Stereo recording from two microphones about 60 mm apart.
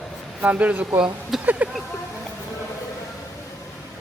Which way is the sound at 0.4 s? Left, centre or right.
Right.